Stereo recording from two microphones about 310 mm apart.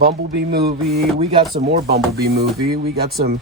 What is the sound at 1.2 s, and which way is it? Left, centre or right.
Speech, centre.